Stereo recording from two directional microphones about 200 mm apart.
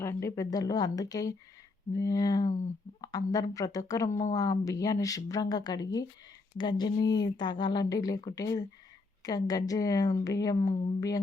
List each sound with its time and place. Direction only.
0.0 s speech: 15° left (ahead or behind)